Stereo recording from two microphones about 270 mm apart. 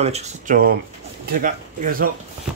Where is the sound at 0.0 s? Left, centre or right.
Right.